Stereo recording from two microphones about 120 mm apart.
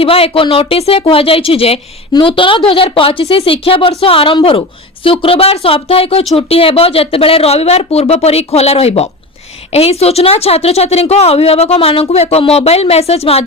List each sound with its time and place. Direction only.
0.0 s a woman's voice: 50° left (ahead or behind)